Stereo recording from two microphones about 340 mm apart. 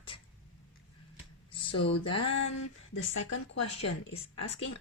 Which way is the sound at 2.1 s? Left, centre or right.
Left.